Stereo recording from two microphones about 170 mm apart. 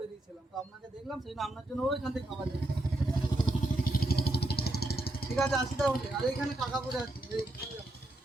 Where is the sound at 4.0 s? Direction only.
65° left (ahead or behind).